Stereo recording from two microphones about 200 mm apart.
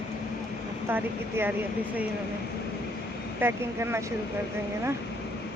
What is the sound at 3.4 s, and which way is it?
Speech, 15° right (ahead or behind).